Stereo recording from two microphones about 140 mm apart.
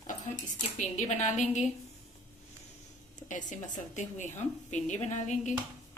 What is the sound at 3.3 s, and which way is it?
A woman's voice, 65° left (ahead or behind).